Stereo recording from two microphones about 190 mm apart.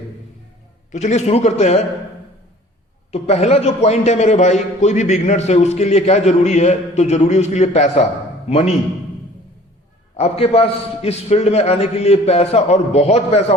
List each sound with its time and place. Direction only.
0.9 s a man's voice: 40° left (ahead or behind)
3.1 s a man's voice: 35° left (ahead or behind)
10.2 s a man's voice: 35° left (ahead or behind)